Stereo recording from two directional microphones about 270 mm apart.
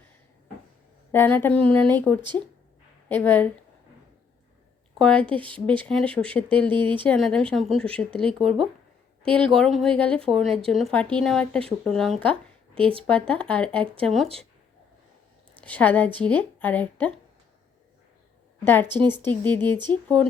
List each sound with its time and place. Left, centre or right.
1.1 s speech: centre
4.9 s a woman's voice: centre
5.2 s speech: centre
5.5 s speech: centre
12.7 s speech: centre
13.3 s speech: centre
15.6 s speech: centre
18.6 s speech: centre
18.9 s speech: centre
19.2 s speech: centre